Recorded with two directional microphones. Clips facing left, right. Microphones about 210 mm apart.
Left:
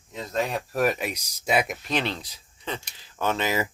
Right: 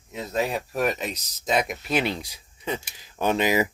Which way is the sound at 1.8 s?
10° right (ahead or behind).